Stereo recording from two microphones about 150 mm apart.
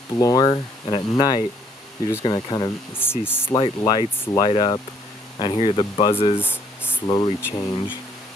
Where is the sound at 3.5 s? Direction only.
30° left (ahead or behind).